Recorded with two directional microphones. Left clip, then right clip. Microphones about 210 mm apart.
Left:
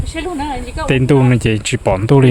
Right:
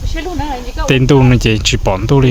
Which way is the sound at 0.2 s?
40° left (ahead or behind).